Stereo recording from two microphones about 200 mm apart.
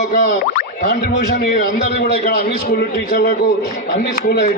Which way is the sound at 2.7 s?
50° left (ahead or behind).